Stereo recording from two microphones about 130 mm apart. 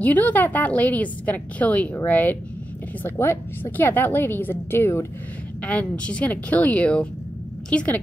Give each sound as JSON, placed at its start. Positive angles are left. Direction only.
{"t": 0.0, "sound": "a woman's voice", "side_deg": 10}